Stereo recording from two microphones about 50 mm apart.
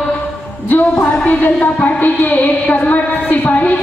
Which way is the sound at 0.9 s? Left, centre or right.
Left.